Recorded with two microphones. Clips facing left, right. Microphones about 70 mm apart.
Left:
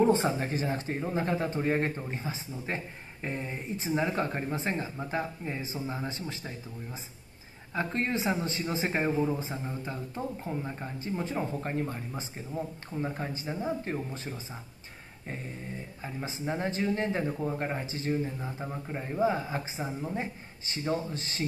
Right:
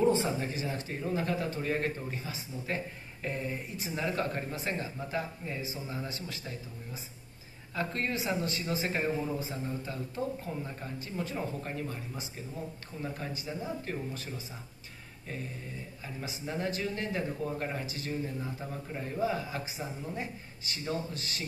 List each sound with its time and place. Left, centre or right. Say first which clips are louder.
0.0 s speech: left 3 dB; left
7.7 s speech: left 3 dB; left
16.0 s speech: left 4 dB; left